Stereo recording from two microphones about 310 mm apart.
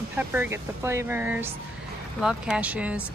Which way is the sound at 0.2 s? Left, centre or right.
Centre.